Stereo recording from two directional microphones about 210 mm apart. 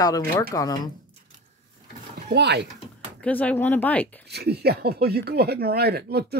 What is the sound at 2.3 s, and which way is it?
Speech, 55° right (ahead or behind).